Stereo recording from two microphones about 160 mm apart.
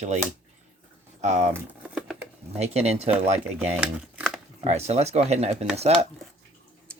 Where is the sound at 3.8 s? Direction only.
5° right (ahead or behind).